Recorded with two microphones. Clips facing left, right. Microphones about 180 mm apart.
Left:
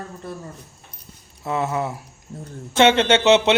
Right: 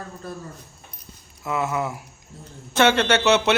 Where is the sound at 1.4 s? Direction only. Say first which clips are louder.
Left 1 dB; 30° left (ahead or behind).